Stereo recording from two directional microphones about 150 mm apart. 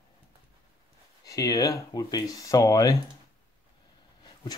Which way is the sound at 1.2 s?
25° left (ahead or behind).